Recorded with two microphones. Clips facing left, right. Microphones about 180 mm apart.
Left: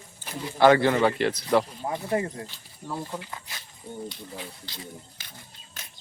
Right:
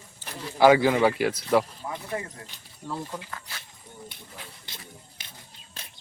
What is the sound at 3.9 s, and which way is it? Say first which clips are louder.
Speech: left 10 dB; 30° left (ahead or behind).